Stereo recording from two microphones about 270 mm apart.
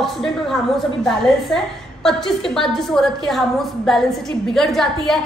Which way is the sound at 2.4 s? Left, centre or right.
Centre.